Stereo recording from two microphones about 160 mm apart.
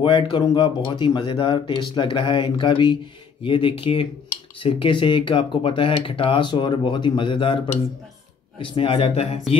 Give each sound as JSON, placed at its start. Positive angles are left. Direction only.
{"t": 0.0, "sound": "speech", "side_deg": 30}